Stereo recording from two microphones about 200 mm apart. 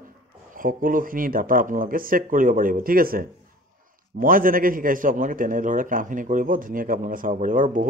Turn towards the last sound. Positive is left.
turn(degrees=-40)  # may be behind; listen again after turning